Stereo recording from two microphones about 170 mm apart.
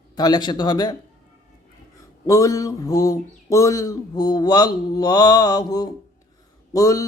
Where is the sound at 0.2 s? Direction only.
25° left (ahead or behind).